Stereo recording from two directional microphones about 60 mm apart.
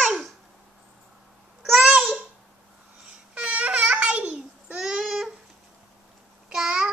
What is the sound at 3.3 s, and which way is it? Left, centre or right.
Babbling, centre.